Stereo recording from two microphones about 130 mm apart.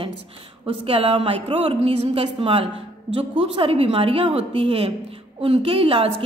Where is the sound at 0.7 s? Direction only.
45° right (ahead or behind).